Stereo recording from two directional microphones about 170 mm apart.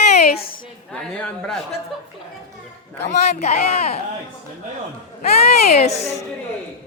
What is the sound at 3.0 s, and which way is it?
Speech, 40° left (ahead or behind).